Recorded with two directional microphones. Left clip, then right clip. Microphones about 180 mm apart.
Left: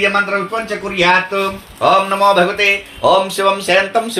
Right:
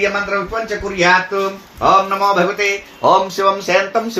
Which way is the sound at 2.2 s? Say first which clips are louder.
Left 3 dB; 40° right (ahead or behind).